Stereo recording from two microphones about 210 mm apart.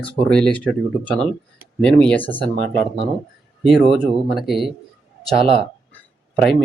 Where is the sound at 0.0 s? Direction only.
5° left (ahead or behind).